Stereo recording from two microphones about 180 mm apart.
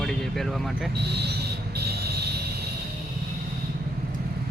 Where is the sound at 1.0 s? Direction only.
65° right (ahead or behind).